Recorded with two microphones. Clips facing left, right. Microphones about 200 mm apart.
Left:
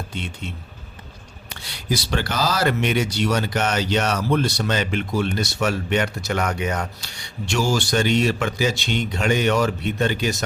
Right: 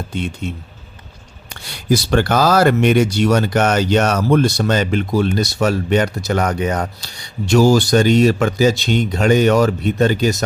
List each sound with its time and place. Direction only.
0.1 s speech: 45° right (ahead or behind)
1.9 s speech: 50° right (ahead or behind)